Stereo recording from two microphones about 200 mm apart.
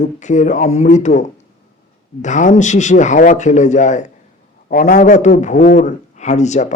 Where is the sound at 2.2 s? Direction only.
35° left (ahead or behind).